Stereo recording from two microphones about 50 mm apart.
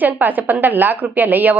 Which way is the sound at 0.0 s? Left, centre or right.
Right.